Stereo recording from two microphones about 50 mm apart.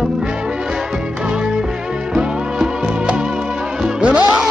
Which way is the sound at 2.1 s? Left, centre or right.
Centre.